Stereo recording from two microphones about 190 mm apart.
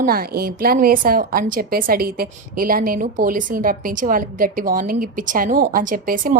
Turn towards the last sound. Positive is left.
turn(degrees=-45)  # may be behind; listen again after turning